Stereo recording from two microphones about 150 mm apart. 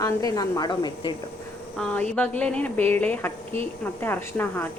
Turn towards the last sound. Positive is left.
turn(degrees=10)  # may be behind; listen again after turning